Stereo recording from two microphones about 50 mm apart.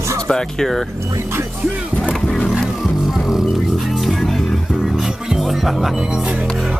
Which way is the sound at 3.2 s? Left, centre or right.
Centre.